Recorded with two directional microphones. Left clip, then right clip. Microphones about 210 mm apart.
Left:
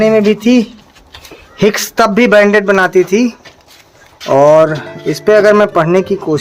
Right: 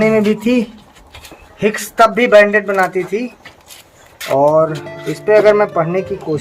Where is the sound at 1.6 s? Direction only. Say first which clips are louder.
Left 1 dB; 45° left (ahead or behind).